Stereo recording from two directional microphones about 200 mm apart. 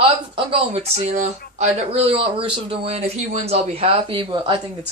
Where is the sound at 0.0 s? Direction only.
25° right (ahead or behind).